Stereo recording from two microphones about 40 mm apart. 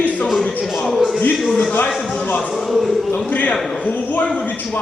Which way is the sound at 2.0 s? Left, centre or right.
Centre.